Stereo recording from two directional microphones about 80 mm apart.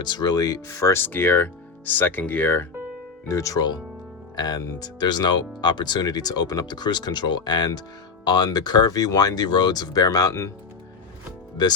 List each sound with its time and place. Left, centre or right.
0.0 s speech: left
0.9 s speech: left
3.2 s speech: left
4.4 s speech: left